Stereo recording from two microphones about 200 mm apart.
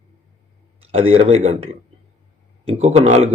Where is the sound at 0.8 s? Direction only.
30° right (ahead or behind).